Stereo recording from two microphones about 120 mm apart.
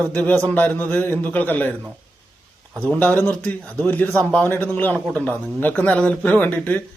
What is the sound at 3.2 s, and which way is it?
A man's voice, 15° left (ahead or behind).